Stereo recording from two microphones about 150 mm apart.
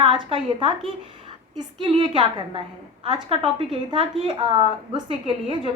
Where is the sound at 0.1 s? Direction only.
35° right (ahead or behind).